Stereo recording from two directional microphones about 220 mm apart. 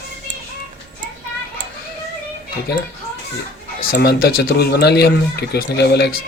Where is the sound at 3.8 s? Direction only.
45° left (ahead or behind).